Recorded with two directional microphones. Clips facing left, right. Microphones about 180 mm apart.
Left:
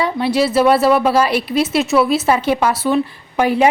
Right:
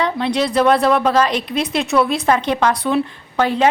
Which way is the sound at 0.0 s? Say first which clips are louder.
Left 2 dB; 5° left (ahead or behind).